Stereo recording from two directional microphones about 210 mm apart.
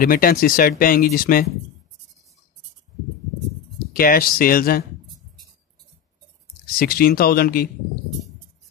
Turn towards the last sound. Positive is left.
turn(degrees=45)  # may be behind; listen again after turning